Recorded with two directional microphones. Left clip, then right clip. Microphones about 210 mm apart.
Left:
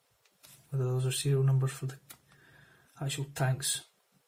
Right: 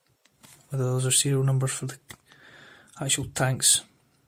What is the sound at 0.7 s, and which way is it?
Speech, 45° right (ahead or behind).